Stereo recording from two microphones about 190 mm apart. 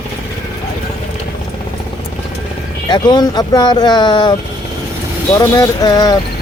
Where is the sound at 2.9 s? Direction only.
20° left (ahead or behind).